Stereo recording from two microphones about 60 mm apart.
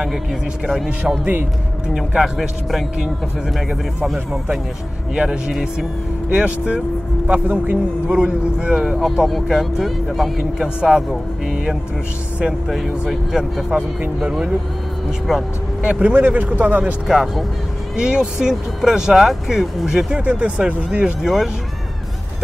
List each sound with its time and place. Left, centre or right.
0.0 s speech: centre
2.0 s speech: centre
5.1 s speech: centre
5.5 s speech: centre
6.3 s speech: centre
8.2 s speech: centre
12.6 s speech: centre
13.7 s speech: right
15.8 s speech: centre
17.1 s speech: centre
20.2 s speech: right; by 21.5 s centre